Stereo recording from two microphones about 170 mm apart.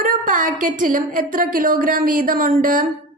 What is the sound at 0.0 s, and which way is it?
A woman's voice, 55° right (ahead or behind).